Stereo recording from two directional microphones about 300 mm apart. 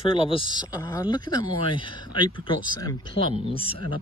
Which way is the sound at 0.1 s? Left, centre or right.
Centre.